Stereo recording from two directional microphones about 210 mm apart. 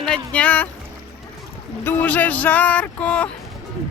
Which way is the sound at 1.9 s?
10° left (ahead or behind).